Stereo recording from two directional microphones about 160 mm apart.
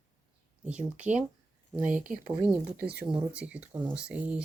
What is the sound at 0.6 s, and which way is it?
Speech, 10° right (ahead or behind).